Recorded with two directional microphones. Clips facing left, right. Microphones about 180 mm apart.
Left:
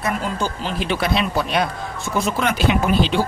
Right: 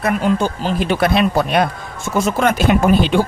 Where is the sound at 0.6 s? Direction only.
45° right (ahead or behind).